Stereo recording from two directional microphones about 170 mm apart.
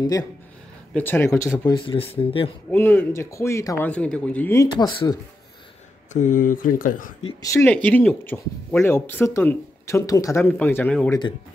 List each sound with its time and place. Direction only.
0.0 s speech: 25° left (ahead or behind)
0.9 s speech: 10° left (ahead or behind)
1.7 s speech: 30° left (ahead or behind)
2.7 s speech: 10° left (ahead or behind)
4.6 s speech: 25° left (ahead or behind)
6.1 s speech: 45° left (ahead or behind)
7.4 s speech: 15° left (ahead or behind)
11.1 s speech: 25° left (ahead or behind)